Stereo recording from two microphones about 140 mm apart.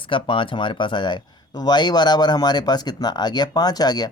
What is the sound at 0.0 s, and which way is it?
Speech, 35° left (ahead or behind).